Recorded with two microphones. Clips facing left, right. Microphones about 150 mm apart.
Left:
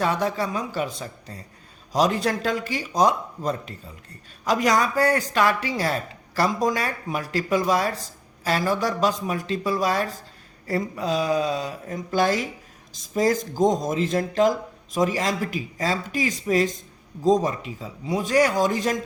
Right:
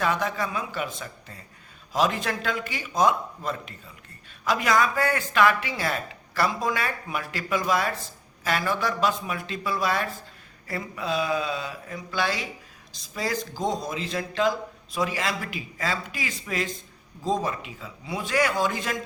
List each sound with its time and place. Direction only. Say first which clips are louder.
0.0 s speech: left 3 dB; 35° left (ahead or behind)